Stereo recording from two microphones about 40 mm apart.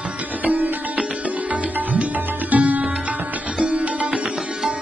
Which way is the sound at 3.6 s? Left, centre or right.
Right.